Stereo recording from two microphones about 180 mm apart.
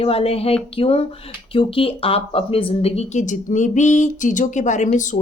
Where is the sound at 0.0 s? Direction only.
35° left (ahead or behind).